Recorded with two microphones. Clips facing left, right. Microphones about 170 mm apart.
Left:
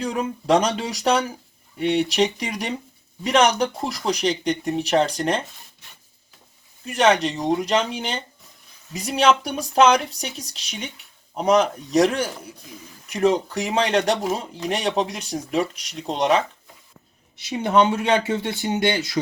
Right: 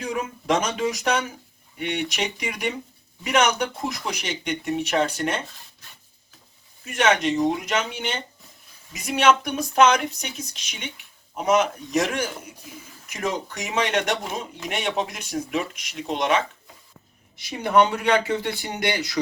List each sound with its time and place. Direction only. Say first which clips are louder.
0.0 s speech: left 3 dB; 35° left (ahead or behind)
6.9 s speech: left 2 dB; 35° left (ahead or behind)
17.3 s speech: left 1 dB; 25° left (ahead or behind)